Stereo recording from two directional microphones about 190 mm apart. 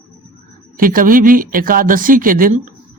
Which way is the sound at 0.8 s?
45° right (ahead or behind).